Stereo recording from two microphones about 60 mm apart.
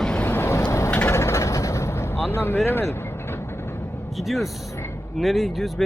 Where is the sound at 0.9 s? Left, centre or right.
Left.